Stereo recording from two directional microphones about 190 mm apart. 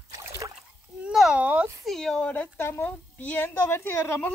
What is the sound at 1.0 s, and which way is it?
Speech, 5° right (ahead or behind).